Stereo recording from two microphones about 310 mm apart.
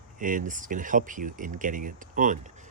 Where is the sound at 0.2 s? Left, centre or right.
Right.